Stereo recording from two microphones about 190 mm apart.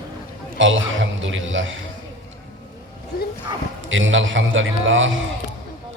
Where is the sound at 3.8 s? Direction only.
90° right.